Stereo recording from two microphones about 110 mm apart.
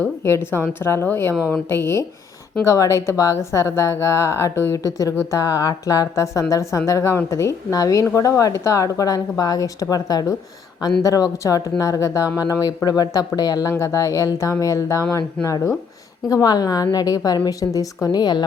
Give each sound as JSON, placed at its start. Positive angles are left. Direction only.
{"t": 0.3, "sound": "speech", "side_deg": 25}